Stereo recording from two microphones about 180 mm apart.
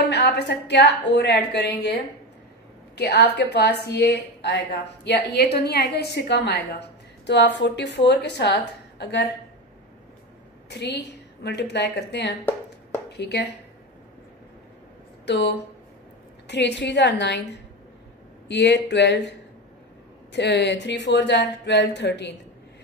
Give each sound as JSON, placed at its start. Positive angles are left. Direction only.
{"t": 0.1, "sound": "a woman's voice", "side_deg": 70}
{"t": 3.0, "sound": "a woman's voice", "side_deg": 65}
{"t": 10.7, "sound": "a woman's voice", "side_deg": 70}
{"t": 15.2, "sound": "a woman's voice", "side_deg": 70}
{"t": 18.5, "sound": "a woman's voice", "side_deg": 70}
{"t": 20.3, "sound": "a woman's voice", "side_deg": 70}